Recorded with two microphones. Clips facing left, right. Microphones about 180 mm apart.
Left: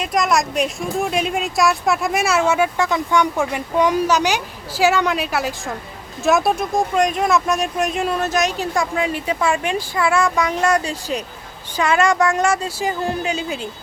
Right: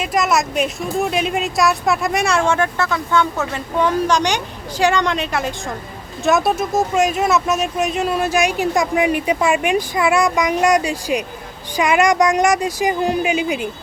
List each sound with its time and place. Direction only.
0.0 s a woman's voice: centre (ahead or behind)